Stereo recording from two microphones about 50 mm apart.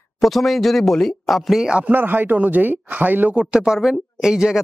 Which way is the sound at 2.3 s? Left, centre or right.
Right.